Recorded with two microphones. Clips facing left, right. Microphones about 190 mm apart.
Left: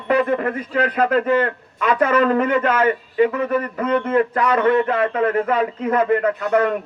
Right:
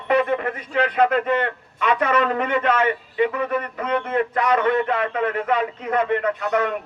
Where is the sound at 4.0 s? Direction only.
50° left (ahead or behind).